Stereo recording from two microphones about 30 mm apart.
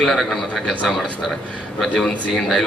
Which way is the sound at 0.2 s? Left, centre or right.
Centre.